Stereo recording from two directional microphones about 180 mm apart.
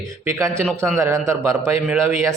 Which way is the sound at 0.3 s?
15° right (ahead or behind).